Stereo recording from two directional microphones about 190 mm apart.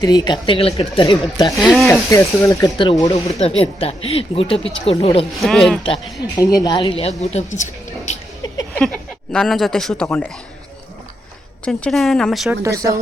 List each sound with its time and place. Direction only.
0.0 s speech: 20° left (ahead or behind)
1.5 s a woman's voice: centre (ahead or behind)
1.9 s speech: 15° left (ahead or behind)
3.4 s speech: 30° left (ahead or behind)
5.4 s a woman's voice: centre (ahead or behind)
5.8 s a woman's voice: 25° left (ahead or behind)
8.7 s a woman's voice: 5° left (ahead or behind)
11.6 s a woman's voice: 5° left (ahead or behind)